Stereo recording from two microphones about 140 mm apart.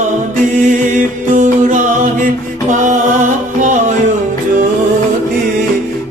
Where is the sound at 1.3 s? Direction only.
65° right (ahead or behind).